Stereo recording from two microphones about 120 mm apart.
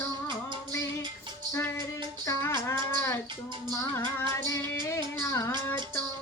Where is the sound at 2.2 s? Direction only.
25° left (ahead or behind).